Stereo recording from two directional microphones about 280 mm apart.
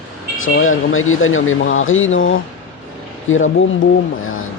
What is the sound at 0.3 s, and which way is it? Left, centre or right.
Speech, left.